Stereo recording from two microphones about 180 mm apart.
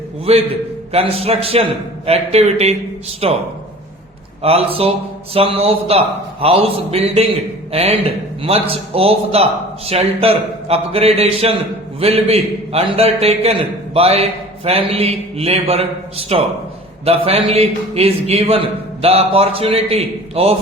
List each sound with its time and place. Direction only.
0.3 s a man's voice: 35° right (ahead or behind)
4.4 s a man's voice: 35° right (ahead or behind)